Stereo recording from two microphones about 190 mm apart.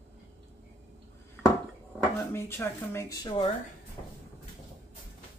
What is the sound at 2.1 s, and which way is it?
Speech, 15° left (ahead or behind).